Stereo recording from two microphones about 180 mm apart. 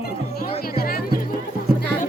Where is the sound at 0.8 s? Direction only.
55° left (ahead or behind).